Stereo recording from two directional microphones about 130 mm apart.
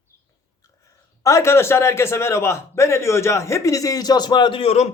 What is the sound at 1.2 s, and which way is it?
A man's voice, 25° left (ahead or behind).